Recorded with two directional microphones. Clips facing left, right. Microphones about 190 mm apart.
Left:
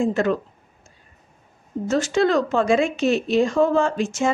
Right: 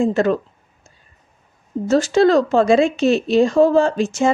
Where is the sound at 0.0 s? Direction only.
35° right (ahead or behind).